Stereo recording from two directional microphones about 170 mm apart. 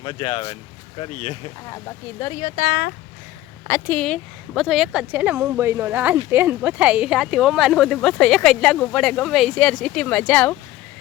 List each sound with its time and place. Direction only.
0.0 s speech: 30° left (ahead or behind)
2.4 s speech: 60° left (ahead or behind)
3.7 s speech: 10° left (ahead or behind)